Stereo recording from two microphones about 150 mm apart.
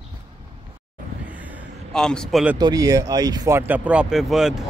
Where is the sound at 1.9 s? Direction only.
5° left (ahead or behind).